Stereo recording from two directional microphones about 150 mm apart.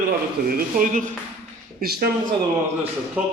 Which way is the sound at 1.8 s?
90° right.